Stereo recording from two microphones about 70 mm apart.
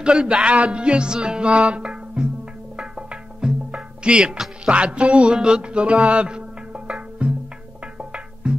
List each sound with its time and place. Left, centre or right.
0.0 s music: centre